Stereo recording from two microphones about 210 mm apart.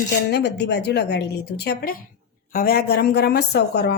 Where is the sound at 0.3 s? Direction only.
55° left (ahead or behind).